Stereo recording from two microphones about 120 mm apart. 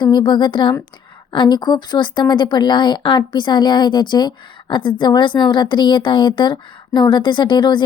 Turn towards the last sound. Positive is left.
turn(degrees=40)  # may be behind; listen again after turning